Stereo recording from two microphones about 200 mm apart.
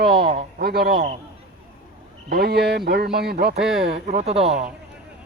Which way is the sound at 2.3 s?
50° right (ahead or behind).